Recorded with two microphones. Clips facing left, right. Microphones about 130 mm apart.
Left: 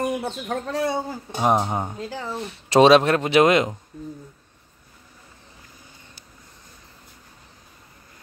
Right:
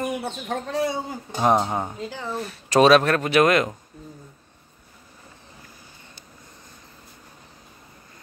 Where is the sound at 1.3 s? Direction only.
5° left (ahead or behind).